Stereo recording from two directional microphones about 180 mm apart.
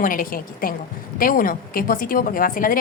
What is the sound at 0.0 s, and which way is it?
A woman's voice, 50° left (ahead or behind).